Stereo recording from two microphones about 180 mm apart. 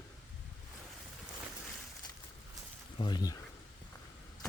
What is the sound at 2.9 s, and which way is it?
Speech, 25° left (ahead or behind).